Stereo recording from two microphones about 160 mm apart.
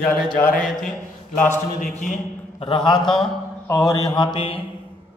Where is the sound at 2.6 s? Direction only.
30° left (ahead or behind).